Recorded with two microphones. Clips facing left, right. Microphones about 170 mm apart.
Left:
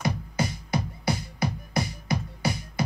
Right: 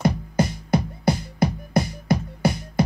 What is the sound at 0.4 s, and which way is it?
Music, 50° right (ahead or behind).